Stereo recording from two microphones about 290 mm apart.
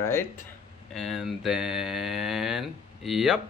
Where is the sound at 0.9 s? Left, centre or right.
Centre.